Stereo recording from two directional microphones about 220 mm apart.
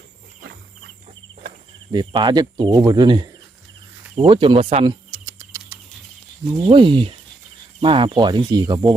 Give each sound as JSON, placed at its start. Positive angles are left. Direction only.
{"t": 1.9, "sound": "speech", "side_deg": -20}
{"t": 4.1, "sound": "a sound", "side_deg": -25}
{"t": 6.7, "sound": "speech", "side_deg": -25}